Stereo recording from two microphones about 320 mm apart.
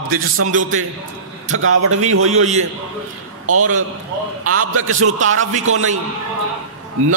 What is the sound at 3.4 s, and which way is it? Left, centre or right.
A man's voice, right.